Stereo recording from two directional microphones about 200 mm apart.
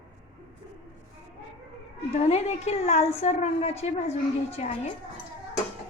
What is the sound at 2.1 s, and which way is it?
A woman's voice, 35° left (ahead or behind).